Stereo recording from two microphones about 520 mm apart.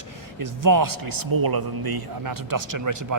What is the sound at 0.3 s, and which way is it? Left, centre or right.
Speech, right.